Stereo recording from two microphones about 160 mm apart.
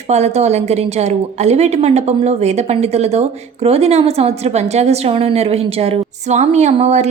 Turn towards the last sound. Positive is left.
turn(degrees=-45)  # may be behind; listen again after turning